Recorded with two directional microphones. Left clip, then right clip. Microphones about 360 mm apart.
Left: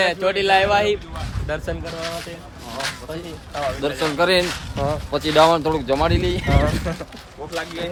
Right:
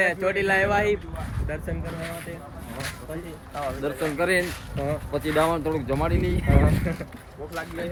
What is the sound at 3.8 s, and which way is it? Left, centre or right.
Speech, centre.